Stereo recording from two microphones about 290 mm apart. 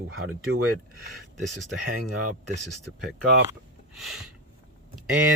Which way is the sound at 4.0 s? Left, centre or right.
Centre.